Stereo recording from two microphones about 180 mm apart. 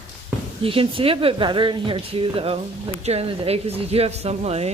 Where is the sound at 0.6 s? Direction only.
30° right (ahead or behind).